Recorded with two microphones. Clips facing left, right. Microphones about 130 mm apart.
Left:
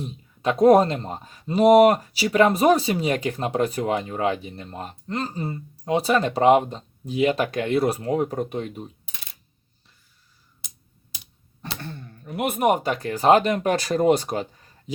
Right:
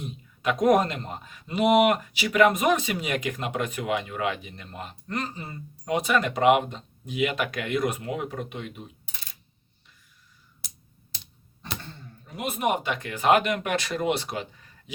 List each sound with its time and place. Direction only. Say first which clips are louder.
0.0 s speech: left 3 dB; 30° left (ahead or behind)
11.6 s speech: left 4 dB; 60° left (ahead or behind); by 14.4 s 40° left (ahead or behind)